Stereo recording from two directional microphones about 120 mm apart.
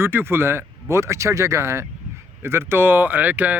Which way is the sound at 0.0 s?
20° right (ahead or behind).